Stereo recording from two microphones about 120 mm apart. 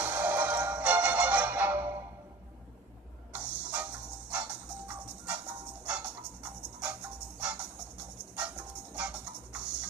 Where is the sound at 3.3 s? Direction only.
10° right (ahead or behind).